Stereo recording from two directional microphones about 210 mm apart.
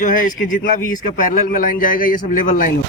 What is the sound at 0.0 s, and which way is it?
A man's voice, 40° left (ahead or behind).